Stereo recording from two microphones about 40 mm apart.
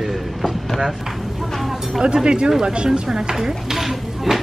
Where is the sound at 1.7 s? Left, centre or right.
Centre.